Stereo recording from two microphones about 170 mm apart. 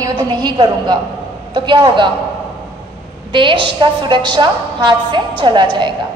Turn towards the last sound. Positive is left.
turn(degrees=-25)  # may be behind; listen again after turning